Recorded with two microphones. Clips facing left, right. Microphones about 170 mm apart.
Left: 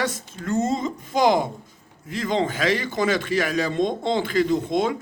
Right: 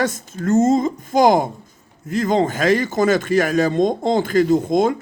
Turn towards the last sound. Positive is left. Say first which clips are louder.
# right 6 dB
turn(degrees=-45)  # may be behind; listen again after turning